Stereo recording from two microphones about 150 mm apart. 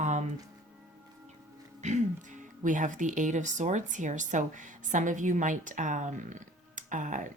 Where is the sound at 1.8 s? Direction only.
50° right (ahead or behind).